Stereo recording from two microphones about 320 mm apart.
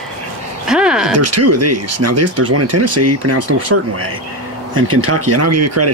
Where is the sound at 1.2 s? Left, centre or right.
Right.